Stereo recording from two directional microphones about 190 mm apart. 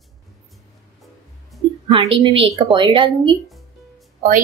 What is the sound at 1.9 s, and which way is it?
A woman's voice, 30° right (ahead or behind).